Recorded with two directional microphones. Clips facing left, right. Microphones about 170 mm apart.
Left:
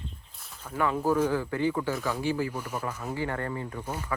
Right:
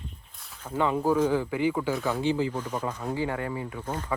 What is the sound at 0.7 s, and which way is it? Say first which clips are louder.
Speech: right 2 dB; 20° right (ahead or behind).